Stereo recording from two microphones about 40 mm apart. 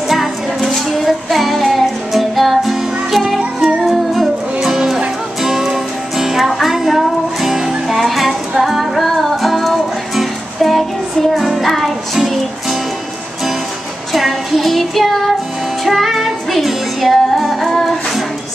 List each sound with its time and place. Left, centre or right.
0.1 s music: centre
4.6 s music: centre
14.1 s child singing: centre
15.8 s music: centre